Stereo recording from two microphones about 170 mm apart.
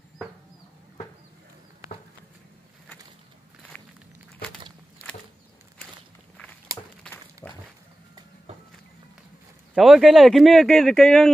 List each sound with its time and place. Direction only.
7.4 s dog: 20° left (ahead or behind)
9.8 s speech: centre (ahead or behind)